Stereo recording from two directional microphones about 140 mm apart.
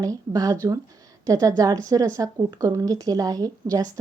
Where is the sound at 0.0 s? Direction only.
25° right (ahead or behind).